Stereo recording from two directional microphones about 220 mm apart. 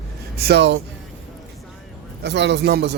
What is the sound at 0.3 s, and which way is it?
Speech, 45° right (ahead or behind).